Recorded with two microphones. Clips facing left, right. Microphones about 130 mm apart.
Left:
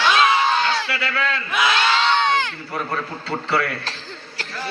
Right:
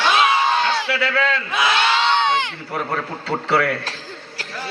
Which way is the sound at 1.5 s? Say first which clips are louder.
Right 1 dB; 25° right (ahead or behind).